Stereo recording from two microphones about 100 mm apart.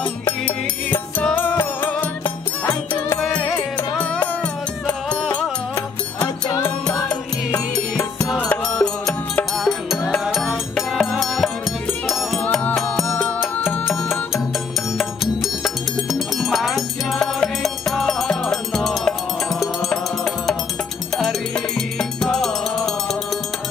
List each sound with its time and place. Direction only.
0.5 s music: 15° left (ahead or behind)
4.0 s music: 10° left (ahead or behind)
6.2 s music: 35° left (ahead or behind)
8.6 s music: 5° left (ahead or behind)
15.6 s music: centre (ahead or behind)